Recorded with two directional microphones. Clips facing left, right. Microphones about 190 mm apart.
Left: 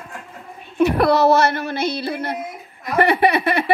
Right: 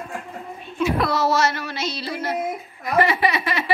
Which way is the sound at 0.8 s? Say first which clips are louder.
Left 6 dB; 65° left (ahead or behind).